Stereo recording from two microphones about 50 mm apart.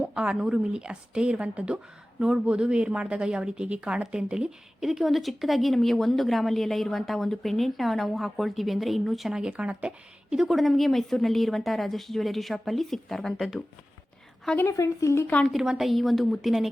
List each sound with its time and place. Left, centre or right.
0.1 s a woman's voice: centre
4.9 s a woman's voice: centre
9.3 s a woman's voice: centre
10.5 s a woman's voice: centre
14.7 s speech: left
15.4 s a woman's voice: centre